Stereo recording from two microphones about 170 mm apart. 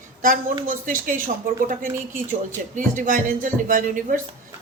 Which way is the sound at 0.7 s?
50° right (ahead or behind).